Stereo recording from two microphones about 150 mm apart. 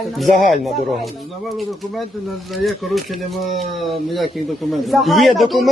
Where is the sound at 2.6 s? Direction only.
Centre (ahead or behind).